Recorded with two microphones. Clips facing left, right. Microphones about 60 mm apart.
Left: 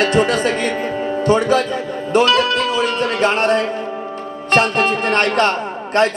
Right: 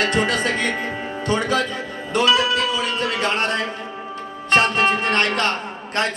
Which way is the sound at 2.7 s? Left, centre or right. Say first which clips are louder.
Left 5 dB; left.